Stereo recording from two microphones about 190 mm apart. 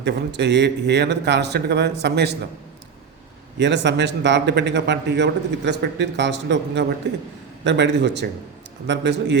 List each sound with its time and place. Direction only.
0.0 s speech: 65° right (ahead or behind)
3.6 s a man's voice: 65° right (ahead or behind)